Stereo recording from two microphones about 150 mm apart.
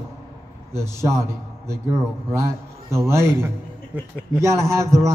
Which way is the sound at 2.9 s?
20° right (ahead or behind).